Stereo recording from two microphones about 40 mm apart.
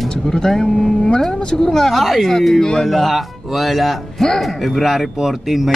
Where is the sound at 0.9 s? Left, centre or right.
Left.